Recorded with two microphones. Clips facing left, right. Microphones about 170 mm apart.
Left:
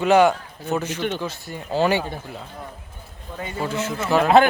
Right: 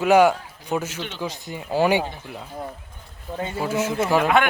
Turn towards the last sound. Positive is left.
turn(degrees=30)  # may be behind; listen again after turning